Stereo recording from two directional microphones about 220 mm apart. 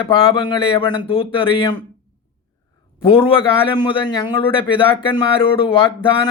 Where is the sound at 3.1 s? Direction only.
25° left (ahead or behind).